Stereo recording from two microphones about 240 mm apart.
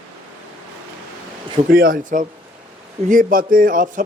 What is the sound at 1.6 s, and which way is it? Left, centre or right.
A man's voice, right.